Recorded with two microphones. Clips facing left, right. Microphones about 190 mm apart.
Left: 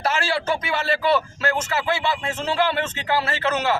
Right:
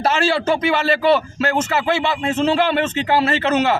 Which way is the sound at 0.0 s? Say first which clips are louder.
Right 6 dB; 25° right (ahead or behind).